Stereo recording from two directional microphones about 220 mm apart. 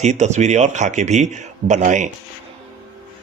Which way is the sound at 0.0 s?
30° right (ahead or behind).